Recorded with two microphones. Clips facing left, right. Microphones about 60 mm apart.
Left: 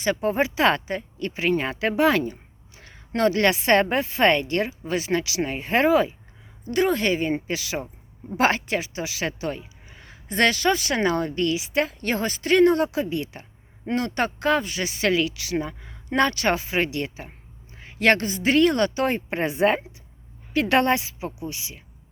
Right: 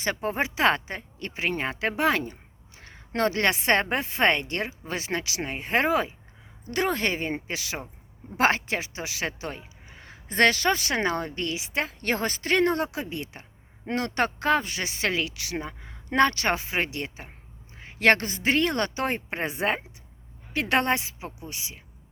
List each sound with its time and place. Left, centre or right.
0.0 s speech: right
0.3 s speech: right
2.7 s speech: right
4.9 s speech: right
6.7 s speech: right
12.0 s speech: right
13.8 s speech: right
14.3 s speech: right
15.5 s speech: right
16.0 s speech: right
18.0 s speech: right
18.5 s speech: right
19.0 s speech: right
20.5 s speech: right